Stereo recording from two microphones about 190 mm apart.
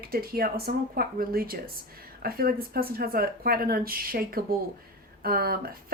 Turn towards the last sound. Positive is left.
turn(degrees=-50)  # may be behind; listen again after turning